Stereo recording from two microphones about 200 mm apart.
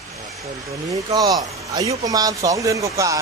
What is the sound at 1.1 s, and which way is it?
Speech, 20° right (ahead or behind).